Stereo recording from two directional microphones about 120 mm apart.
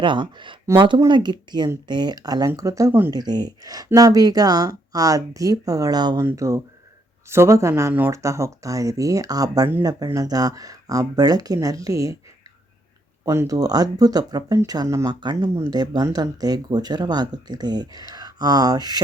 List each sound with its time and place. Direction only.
0.0 s speech: 45° right (ahead or behind)
6.2 s speech: 25° right (ahead or behind)
13.2 s speech: 25° right (ahead or behind)
15.2 s speech: 40° right (ahead or behind)